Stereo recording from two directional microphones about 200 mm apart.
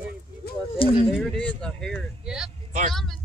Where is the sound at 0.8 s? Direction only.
25° left (ahead or behind).